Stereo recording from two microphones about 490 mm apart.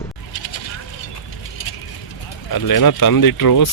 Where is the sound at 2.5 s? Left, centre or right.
Left.